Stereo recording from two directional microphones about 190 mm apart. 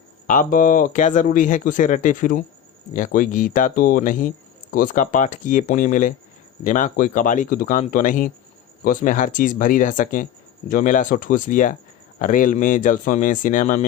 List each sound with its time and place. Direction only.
0.3 s speech: 45° left (ahead or behind)